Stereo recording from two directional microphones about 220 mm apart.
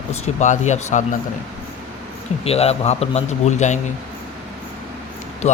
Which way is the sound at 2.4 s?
30° left (ahead or behind).